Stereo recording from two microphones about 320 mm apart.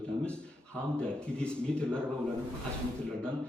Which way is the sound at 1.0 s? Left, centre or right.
Centre.